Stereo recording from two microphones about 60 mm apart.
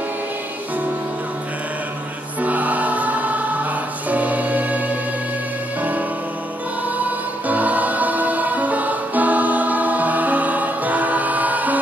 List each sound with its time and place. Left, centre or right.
2.4 s music: right
7.4 s music: right